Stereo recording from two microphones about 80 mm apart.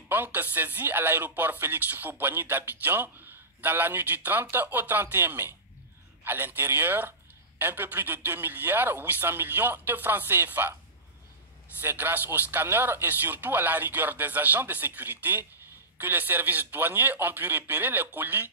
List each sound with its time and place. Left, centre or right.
0.1 s speech: right
11.8 s speech: right